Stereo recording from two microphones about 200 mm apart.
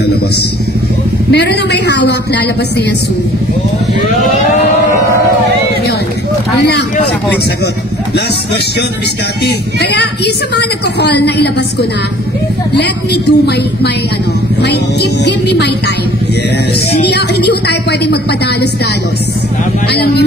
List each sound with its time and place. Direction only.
1.3 s a woman's voice: 55° left (ahead or behind)
9.8 s a woman's voice: 55° left (ahead or behind)
12.7 s a woman's voice: 55° left (ahead or behind)
17.0 s a woman's voice: 55° left (ahead or behind)
19.9 s a man's voice: 55° left (ahead or behind)